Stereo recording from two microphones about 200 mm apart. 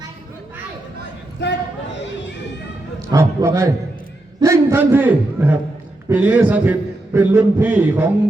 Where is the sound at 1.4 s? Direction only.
60° left (ahead or behind).